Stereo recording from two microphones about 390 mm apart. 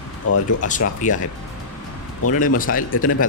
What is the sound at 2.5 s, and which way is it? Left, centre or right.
Speech, left.